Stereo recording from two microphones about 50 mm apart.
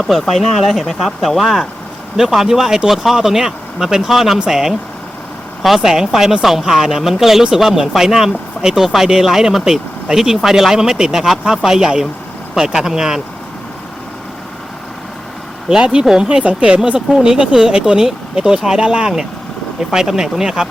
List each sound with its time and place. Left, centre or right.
0.0 s speech: centre
15.7 s speech: centre